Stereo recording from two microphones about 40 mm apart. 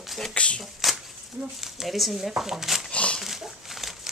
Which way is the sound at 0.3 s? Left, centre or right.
Left.